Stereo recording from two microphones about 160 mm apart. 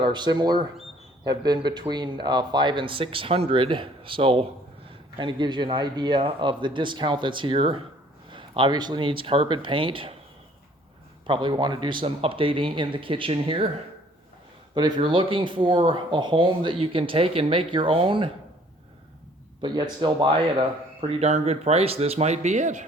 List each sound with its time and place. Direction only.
0.0 s a man's voice: 30° right (ahead or behind)
11.3 s speech: 30° right (ahead or behind)
14.8 s speech: 25° right (ahead or behind)
19.6 s speech: 30° right (ahead or behind); by 22.9 s 50° right (ahead or behind)